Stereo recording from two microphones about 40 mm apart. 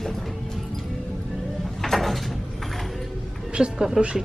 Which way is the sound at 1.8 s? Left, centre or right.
Centre.